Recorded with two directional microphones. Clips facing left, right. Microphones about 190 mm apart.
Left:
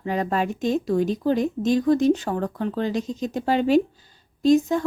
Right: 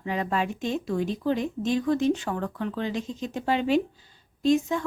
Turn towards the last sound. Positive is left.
turn(degrees=40)  # may be behind; listen again after turning